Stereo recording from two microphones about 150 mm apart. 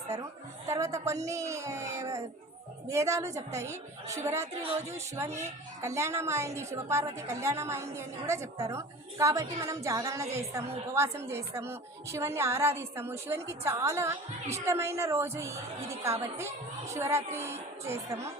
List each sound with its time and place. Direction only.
0.7 s a woman's voice: 20° right (ahead or behind)